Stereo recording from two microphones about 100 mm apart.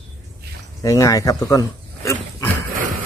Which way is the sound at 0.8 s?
35° left (ahead or behind).